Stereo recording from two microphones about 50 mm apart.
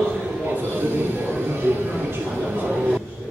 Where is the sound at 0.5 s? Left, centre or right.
Right.